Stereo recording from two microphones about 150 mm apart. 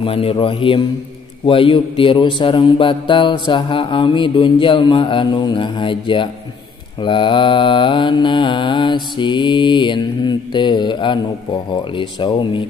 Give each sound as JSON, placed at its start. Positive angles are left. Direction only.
{"t": 0.0, "sound": "mantra", "side_deg": 40}